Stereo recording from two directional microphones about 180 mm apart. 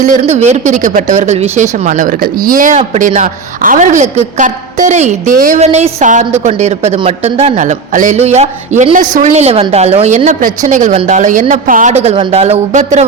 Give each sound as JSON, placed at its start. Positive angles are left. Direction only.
{"t": 0.0, "sound": "speech", "side_deg": -40}